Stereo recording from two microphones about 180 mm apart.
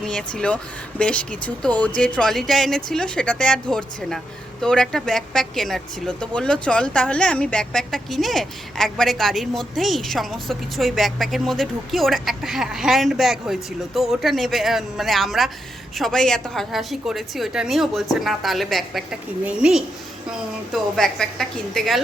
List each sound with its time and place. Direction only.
0.0 s speech: 5° left (ahead or behind)